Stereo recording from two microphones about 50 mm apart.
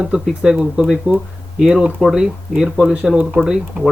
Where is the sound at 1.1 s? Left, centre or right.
Right.